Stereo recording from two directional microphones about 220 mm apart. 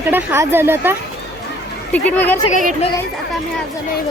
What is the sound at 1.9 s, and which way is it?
Speech, 10° left (ahead or behind).